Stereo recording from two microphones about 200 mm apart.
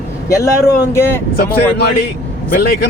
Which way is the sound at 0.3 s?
15° left (ahead or behind).